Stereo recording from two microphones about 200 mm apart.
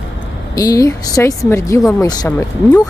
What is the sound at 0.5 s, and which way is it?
Speech, 15° left (ahead or behind).